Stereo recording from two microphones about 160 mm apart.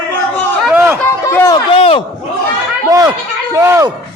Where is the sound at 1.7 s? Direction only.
35° left (ahead or behind).